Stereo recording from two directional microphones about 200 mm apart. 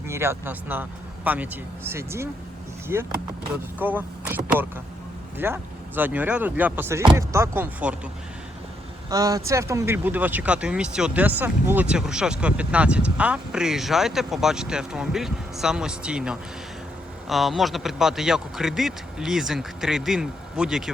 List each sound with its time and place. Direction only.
0.1 s speech: 10° right (ahead or behind)
9.0 s speech: 20° right (ahead or behind); by 20.9 s centre (ahead or behind)